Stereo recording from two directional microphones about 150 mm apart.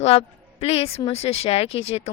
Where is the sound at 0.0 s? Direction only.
40° left (ahead or behind).